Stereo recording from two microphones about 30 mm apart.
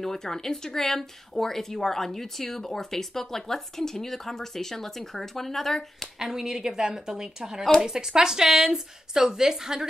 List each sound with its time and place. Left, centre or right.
0.0 s speech: centre
6.1 s a woman's voice: centre